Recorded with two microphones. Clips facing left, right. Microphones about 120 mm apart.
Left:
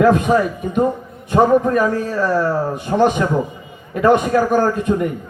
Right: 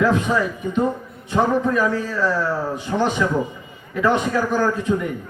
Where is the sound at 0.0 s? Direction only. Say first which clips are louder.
Left 5 dB; 55° left (ahead or behind).